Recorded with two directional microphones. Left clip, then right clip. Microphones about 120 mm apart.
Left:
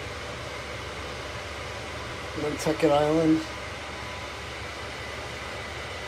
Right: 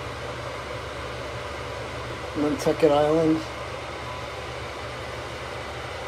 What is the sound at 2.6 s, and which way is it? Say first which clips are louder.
Speech: right 2 dB; 20° right (ahead or behind).